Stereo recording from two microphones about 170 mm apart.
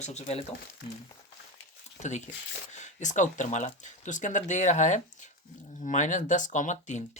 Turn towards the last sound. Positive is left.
turn(degrees=45)  # may be behind; listen again after turning